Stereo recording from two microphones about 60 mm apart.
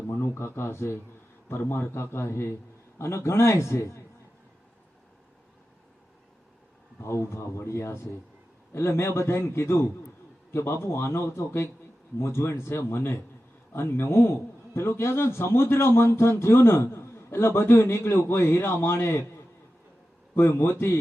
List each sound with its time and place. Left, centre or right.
0.1 s a man's voice: left
7.0 s a man's voice: left
20.3 s a man's voice: left